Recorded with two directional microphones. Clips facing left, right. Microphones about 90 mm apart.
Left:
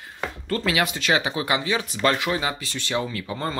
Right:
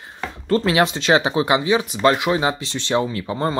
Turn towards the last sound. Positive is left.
turn(degrees=-25)  # may be behind; listen again after turning